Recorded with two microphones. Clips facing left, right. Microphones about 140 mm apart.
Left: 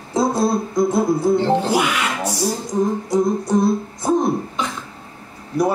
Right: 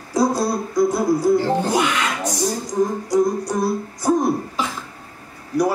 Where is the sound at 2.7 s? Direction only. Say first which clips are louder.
Left 1 dB; 25° left (ahead or behind).